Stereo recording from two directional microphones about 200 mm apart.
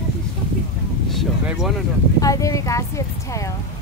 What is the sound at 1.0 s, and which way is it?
Speech, centre (ahead or behind).